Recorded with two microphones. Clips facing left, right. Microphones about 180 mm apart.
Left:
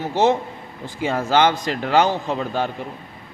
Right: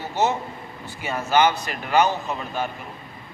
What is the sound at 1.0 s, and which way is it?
Speech, 90° left.